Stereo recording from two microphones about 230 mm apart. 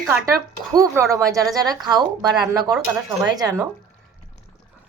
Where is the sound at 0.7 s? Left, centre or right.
Centre.